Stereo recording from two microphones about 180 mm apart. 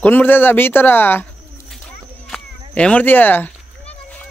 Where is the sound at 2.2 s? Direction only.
5° left (ahead or behind).